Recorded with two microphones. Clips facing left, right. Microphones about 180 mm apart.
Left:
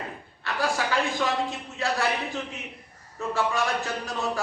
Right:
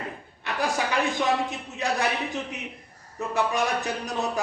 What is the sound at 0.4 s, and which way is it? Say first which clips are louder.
A man's voice: even; 20° right (ahead or behind).